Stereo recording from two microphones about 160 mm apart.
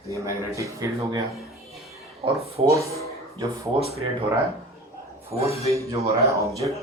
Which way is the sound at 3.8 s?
75° left (ahead or behind).